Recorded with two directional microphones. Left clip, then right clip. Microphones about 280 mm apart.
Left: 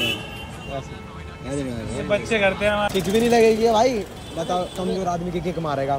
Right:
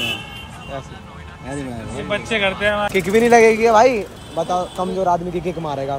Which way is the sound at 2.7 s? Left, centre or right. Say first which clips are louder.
Right 4 dB; centre.